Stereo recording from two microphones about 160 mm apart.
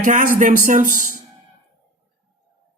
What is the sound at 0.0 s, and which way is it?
Speech, 55° right (ahead or behind).